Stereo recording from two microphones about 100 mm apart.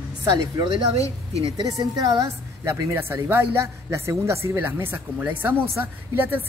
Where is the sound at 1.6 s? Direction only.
35° right (ahead or behind).